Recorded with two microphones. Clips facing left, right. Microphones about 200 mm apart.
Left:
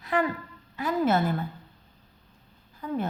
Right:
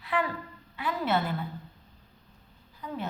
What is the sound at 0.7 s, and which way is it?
Speech, 45° left (ahead or behind).